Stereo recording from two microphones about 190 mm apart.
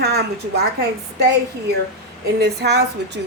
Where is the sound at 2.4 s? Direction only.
60° right (ahead or behind).